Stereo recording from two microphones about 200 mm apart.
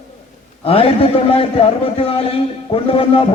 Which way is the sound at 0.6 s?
30° left (ahead or behind).